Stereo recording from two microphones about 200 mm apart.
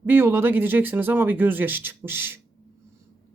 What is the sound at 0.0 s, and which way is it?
Speech, 10° right (ahead or behind).